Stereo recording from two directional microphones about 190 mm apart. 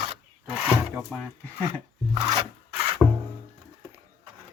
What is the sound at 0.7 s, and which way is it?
Wood, centre (ahead or behind).